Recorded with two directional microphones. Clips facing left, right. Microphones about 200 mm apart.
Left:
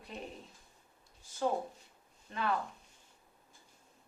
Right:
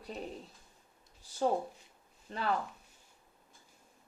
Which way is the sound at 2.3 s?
35° right (ahead or behind).